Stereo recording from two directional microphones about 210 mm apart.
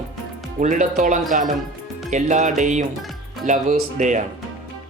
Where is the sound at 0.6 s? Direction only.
35° right (ahead or behind).